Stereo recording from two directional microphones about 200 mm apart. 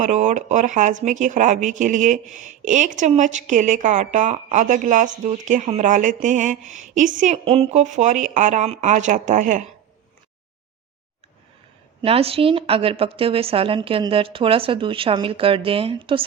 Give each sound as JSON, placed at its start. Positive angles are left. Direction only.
{"t": 0.0, "sound": "speech", "side_deg": -35}
{"t": 12.0, "sound": "a woman's voice", "side_deg": -30}